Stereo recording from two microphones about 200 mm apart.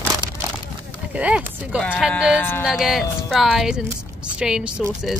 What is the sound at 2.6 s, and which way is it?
A woman's voice, centre (ahead or behind).